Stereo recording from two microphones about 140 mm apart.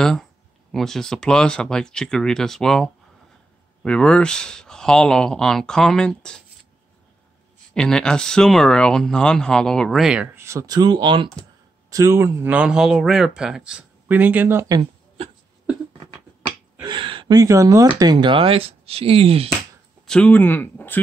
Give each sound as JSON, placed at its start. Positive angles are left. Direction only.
{"t": 0.0, "sound": "speech", "side_deg": 5}
{"t": 7.7, "sound": "speech", "side_deg": 5}
{"t": 10.3, "sound": "speech", "side_deg": -20}
{"t": 11.9, "sound": "speech", "side_deg": -20}
{"t": 16.8, "sound": "a sound", "side_deg": -35}
{"t": 17.4, "sound": "speech", "side_deg": -25}
{"t": 18.1, "sound": "speech", "side_deg": -40}
{"t": 20.1, "sound": "speech", "side_deg": 10}